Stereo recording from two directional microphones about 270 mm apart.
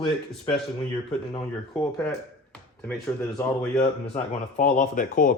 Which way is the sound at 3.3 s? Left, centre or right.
Centre.